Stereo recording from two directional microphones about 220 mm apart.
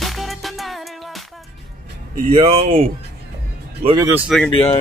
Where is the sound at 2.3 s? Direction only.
25° right (ahead or behind).